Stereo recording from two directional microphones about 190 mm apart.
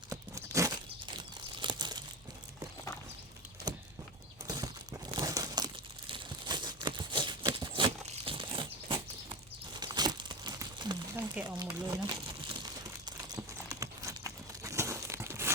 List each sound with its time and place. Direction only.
0.1 s crunch: 15° right (ahead or behind)
1.5 s crumpling: 25° right (ahead or behind)
3.7 s a sound: 20° right (ahead or behind)
4.4 s crumpling: 20° right (ahead or behind)
11.5 s speech: 25° right (ahead or behind)
12.6 s crumpling: 20° right (ahead or behind)